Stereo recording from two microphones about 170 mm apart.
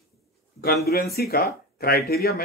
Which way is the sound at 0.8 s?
65° left (ahead or behind).